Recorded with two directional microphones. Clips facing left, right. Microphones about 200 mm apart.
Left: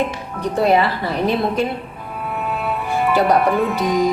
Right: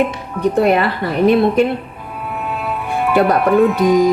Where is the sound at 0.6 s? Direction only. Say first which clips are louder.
Even; 55° right (ahead or behind).